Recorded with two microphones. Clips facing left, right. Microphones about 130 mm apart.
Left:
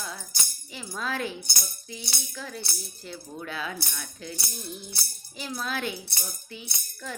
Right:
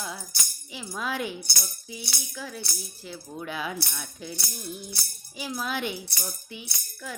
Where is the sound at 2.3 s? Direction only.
5° right (ahead or behind).